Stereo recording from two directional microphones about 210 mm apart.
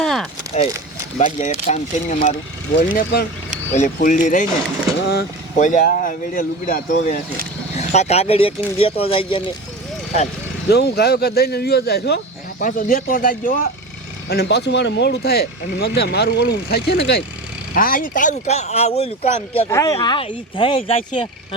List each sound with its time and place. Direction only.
0.0 s a sound: centre (ahead or behind)
1.4 s speech: 35° left (ahead or behind)
3.7 s speech: 35° left (ahead or behind)
4.9 s vehicle: 50° left (ahead or behind)
5.5 s speech: 40° left (ahead or behind)
10.7 s speech: 50° left (ahead or behind)
12.6 s speech: 40° left (ahead or behind)
19.6 s speech: 15° left (ahead or behind)